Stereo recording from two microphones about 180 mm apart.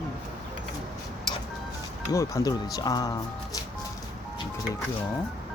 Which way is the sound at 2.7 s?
20° left (ahead or behind).